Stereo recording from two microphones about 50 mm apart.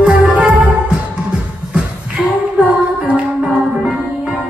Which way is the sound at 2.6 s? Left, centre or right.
Right.